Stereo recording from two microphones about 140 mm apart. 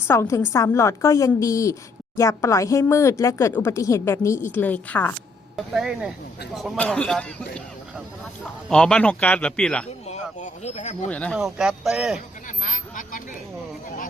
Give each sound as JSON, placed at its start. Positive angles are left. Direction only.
{"t": 0.1, "sound": "speech", "side_deg": 20}
{"t": 5.5, "sound": "a man's voice", "side_deg": -5}
{"t": 8.7, "sound": "a man's voice", "side_deg": 5}
{"t": 10.1, "sound": "speech", "side_deg": 50}
{"t": 11.1, "sound": "a man's voice", "side_deg": 10}
{"t": 11.3, "sound": "speech", "side_deg": -5}
{"t": 12.6, "sound": "vehicle", "side_deg": 70}